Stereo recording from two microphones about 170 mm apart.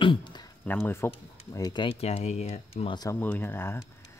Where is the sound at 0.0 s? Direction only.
30° left (ahead or behind).